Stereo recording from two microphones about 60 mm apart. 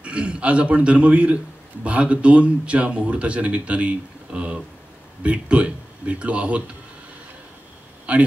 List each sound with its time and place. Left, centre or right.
0.0 s a man's voice: centre
8.1 s a man's voice: right